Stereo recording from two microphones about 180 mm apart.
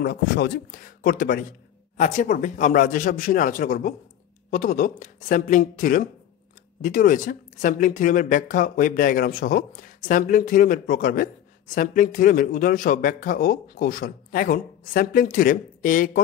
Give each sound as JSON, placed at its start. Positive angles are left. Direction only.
{"t": 0.0, "sound": "speech", "side_deg": 60}